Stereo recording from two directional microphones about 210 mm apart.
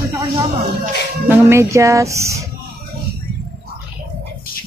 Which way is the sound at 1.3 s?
10° right (ahead or behind).